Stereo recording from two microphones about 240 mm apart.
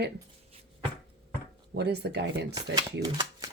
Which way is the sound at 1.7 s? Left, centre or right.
Right.